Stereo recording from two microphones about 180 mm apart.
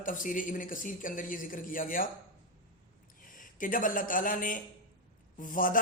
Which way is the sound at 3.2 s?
50° left (ahead or behind).